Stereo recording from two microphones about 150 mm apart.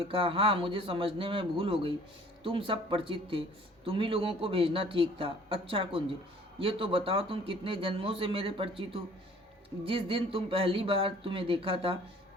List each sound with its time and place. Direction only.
0.1 s speech: 35° right (ahead or behind)